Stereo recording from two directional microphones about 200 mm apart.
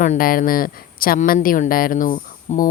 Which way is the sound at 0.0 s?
45° left (ahead or behind).